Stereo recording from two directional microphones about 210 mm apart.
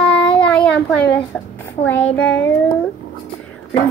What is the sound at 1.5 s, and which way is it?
A child's voice, 10° left (ahead or behind).